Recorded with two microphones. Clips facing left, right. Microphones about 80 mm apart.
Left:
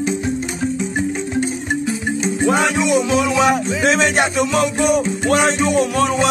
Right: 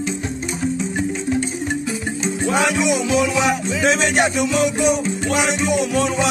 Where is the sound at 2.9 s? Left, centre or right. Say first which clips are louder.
Left 2 dB; left.